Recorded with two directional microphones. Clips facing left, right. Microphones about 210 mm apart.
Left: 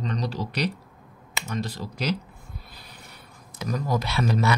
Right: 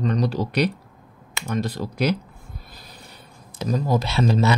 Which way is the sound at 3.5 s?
25° right (ahead or behind).